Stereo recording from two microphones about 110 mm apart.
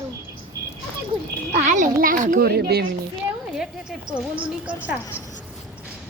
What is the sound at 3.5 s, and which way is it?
Speech, 5° right (ahead or behind).